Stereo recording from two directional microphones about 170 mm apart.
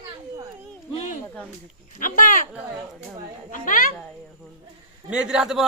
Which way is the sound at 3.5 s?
50° left (ahead or behind).